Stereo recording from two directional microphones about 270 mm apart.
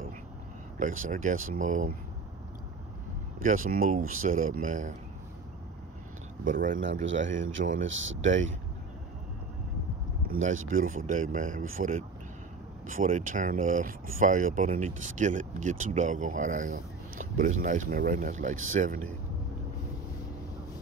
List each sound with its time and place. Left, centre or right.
0.7 s speech: right
3.4 s speech: right
6.4 s speech: right
7.1 s speech: right
8.2 s speech: right
10.2 s a sound: right
10.7 s speech: right